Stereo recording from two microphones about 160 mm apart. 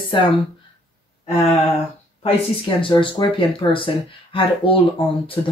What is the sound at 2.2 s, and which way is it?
Speech, 30° left (ahead or behind).